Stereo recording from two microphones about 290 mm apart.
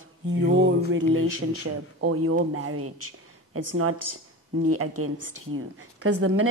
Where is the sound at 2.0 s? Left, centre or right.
Right.